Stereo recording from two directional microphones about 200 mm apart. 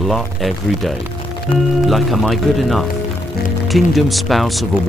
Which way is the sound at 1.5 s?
25° left (ahead or behind).